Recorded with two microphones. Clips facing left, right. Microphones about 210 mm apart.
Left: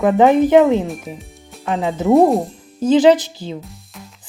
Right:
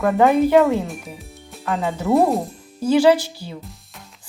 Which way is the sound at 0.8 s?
Centre (ahead or behind).